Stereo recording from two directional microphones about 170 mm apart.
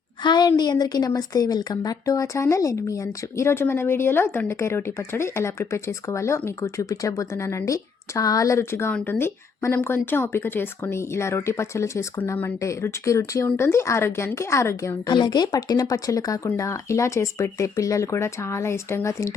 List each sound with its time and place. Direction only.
0.2 s a woman's voice: 25° left (ahead or behind)